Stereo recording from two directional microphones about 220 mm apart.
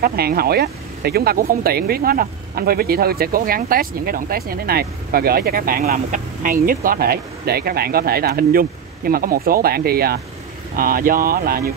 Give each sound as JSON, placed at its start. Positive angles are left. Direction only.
{"t": 0.0, "sound": "speech", "side_deg": -45}